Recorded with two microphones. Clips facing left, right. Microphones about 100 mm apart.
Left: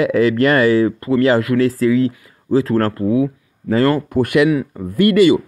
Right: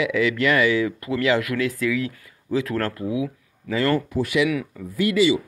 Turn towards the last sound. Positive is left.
turn(degrees=55)  # may be behind; listen again after turning